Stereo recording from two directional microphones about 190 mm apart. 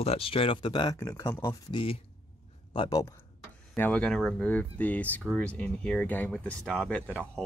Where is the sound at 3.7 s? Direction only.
10° left (ahead or behind).